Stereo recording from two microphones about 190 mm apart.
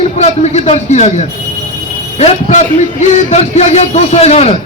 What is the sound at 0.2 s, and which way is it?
A man's voice, 35° left (ahead or behind).